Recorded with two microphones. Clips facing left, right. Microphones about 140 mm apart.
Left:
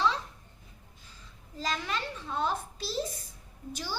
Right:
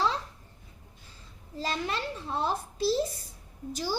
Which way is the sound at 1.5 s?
35° right (ahead or behind).